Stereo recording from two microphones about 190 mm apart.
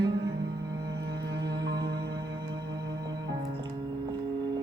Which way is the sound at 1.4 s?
20° right (ahead or behind).